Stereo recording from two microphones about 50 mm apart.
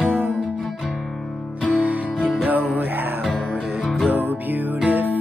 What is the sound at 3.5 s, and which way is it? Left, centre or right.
Music, centre.